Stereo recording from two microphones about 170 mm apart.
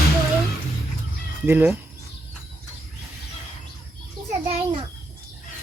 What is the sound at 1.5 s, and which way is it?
Speech, 10° right (ahead or behind).